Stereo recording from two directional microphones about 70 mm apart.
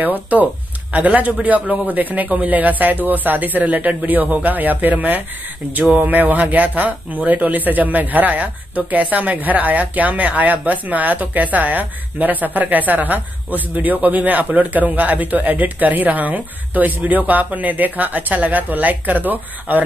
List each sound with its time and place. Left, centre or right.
0.0 s speech: right